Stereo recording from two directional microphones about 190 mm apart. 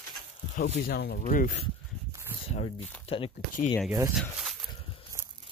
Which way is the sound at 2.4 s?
35° left (ahead or behind).